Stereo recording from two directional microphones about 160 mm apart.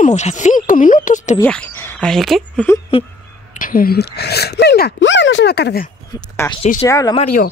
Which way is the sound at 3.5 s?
60° left (ahead or behind).